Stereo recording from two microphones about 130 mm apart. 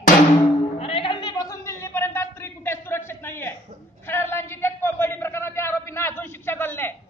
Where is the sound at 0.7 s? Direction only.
50° left (ahead or behind).